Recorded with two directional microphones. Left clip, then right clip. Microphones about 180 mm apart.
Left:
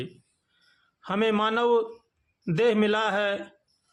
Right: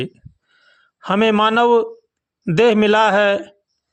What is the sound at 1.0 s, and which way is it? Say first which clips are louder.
A man's voice: right 10 dB; 40° right (ahead or behind).